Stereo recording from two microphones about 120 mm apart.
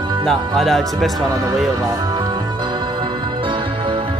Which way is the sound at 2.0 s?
40° right (ahead or behind).